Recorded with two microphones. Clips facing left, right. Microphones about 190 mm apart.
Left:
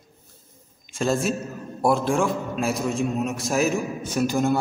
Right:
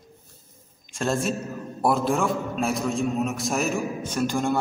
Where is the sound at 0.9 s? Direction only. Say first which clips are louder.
Left 2 dB; centre (ahead or behind).